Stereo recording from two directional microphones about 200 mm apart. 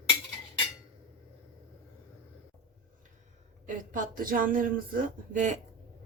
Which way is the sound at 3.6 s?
40° right (ahead or behind).